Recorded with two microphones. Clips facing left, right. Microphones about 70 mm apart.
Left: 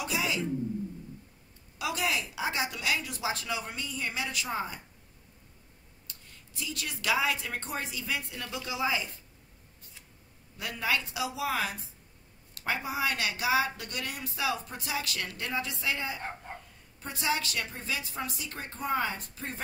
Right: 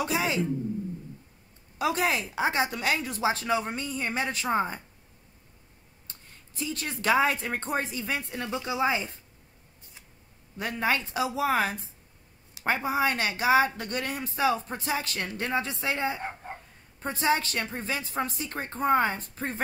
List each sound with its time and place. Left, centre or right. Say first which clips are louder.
0.0 s speech: right 4 dB; right
1.8 s speech: right 5 dB; right
6.0 s speech: right 1 dB; right
10.6 s speech: right 4 dB; right